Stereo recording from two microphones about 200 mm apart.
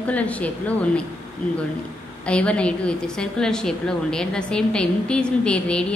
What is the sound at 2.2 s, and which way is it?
A woman's voice, 5° left (ahead or behind).